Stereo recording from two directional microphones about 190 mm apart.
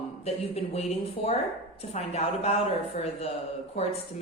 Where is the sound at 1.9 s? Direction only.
35° left (ahead or behind).